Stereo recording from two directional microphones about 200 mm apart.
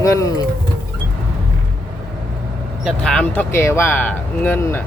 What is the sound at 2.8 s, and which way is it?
Speech, centre (ahead or behind).